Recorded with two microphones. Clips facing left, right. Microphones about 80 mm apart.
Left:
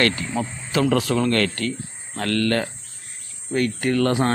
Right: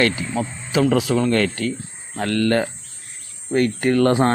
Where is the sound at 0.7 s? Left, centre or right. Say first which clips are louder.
Right 2 dB; centre.